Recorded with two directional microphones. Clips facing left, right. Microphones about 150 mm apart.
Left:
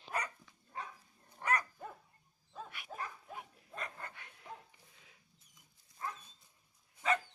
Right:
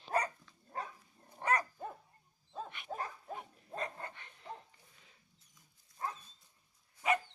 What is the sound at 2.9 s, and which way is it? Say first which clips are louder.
Pig: right 4 dB; 35° right (ahead or behind).